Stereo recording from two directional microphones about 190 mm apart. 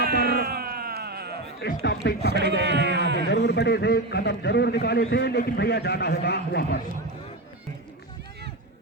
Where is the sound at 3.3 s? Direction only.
60° left (ahead or behind).